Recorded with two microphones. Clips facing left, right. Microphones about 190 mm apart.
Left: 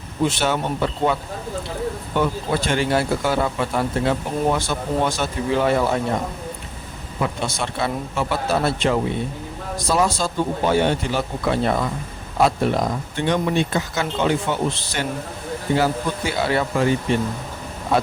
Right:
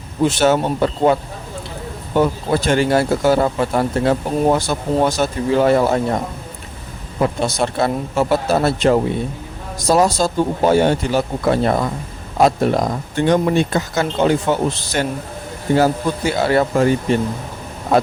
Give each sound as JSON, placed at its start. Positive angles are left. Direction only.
{"t": 0.3, "sound": "speech", "side_deg": -40}
{"t": 7.2, "sound": "speech", "side_deg": -40}